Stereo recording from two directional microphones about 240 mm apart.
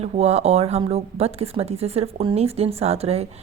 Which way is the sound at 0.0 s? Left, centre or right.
Right.